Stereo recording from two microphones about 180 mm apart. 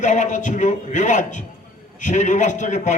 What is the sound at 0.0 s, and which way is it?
A man's voice, 40° left (ahead or behind).